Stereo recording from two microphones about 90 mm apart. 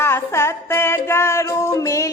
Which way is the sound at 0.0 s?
30° left (ahead or behind).